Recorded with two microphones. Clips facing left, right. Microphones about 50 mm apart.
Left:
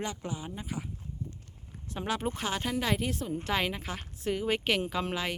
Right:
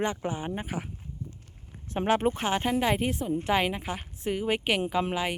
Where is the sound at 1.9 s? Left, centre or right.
Right.